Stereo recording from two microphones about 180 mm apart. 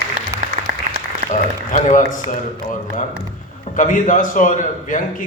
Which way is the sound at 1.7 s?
45° left (ahead or behind).